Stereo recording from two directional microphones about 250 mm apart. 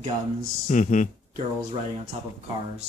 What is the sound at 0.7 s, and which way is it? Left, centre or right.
Speech, left.